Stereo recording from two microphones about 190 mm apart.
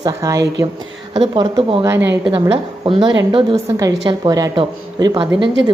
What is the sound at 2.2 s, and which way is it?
Speech, 25° right (ahead or behind).